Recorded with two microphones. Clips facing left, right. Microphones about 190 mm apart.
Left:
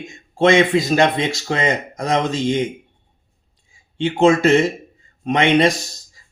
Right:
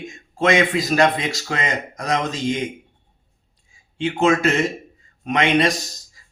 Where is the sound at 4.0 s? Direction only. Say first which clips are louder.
Left 4 dB; 30° left (ahead or behind).